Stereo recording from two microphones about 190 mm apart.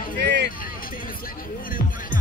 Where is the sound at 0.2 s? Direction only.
65° right (ahead or behind).